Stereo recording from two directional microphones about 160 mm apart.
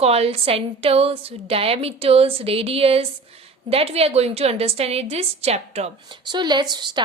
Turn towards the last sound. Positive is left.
turn(degrees=-25)  # may be behind; listen again after turning